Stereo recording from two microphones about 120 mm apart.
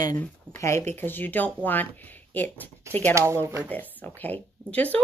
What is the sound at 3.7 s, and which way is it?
Speech, 15° left (ahead or behind).